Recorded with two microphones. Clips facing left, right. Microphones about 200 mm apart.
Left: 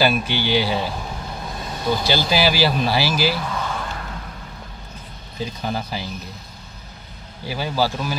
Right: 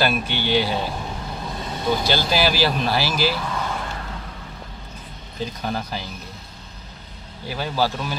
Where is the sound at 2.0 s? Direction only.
5° left (ahead or behind).